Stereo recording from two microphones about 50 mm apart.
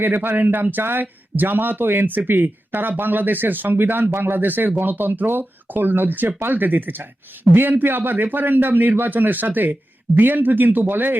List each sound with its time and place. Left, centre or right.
0.0 s speech: right